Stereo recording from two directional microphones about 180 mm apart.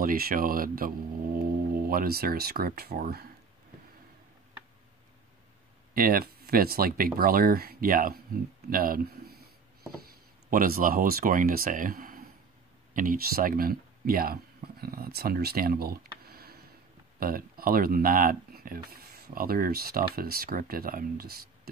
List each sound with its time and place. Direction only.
0.0 s speech: 55° right (ahead or behind)
5.9 s speech: 55° right (ahead or behind)